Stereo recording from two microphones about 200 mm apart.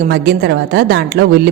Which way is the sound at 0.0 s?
50° right (ahead or behind).